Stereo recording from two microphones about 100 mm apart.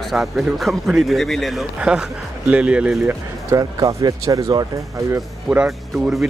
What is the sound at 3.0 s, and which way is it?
Speech, 30° right (ahead or behind).